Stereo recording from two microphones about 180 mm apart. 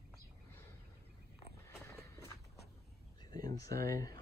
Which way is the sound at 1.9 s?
15° left (ahead or behind).